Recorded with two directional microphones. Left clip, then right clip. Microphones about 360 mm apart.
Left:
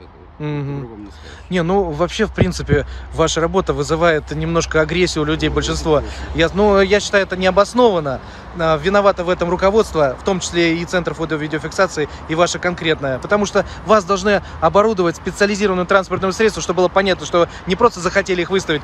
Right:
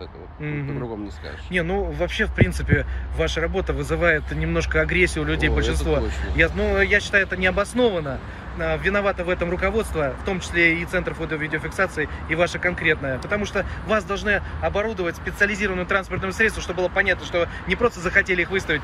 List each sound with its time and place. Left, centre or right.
0.4 s speech: centre